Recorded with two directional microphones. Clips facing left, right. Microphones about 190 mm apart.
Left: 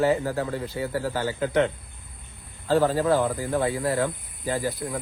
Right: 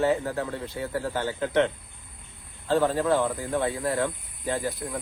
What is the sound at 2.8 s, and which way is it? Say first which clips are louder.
Speech: left 1 dB; 35° left (ahead or behind).